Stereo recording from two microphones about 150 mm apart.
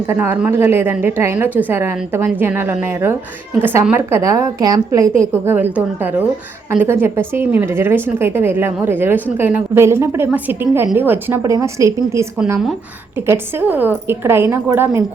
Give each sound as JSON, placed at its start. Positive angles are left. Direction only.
{"t": 0.1, "sound": "a woman's voice", "side_deg": -15}
{"t": 5.2, "sound": "a woman's voice", "side_deg": -15}